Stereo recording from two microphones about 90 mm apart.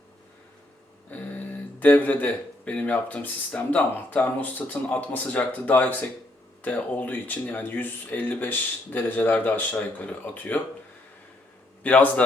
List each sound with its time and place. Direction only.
1.1 s speech: 20° left (ahead or behind)
11.8 s speech: 15° left (ahead or behind)